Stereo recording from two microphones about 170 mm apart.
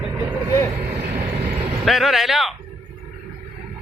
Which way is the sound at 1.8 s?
Centre (ahead or behind).